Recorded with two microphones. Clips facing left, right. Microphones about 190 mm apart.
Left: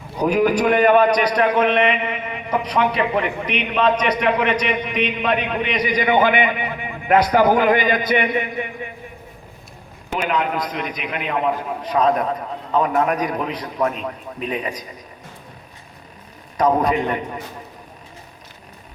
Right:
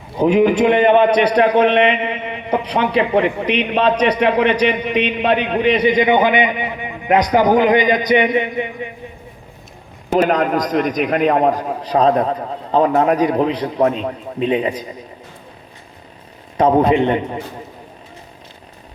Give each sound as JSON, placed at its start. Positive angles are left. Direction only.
{"t": 0.2, "sound": "a man's voice", "side_deg": -25}
{"t": 10.1, "sound": "a man's voice", "side_deg": -40}
{"t": 16.6, "sound": "a man's voice", "side_deg": -30}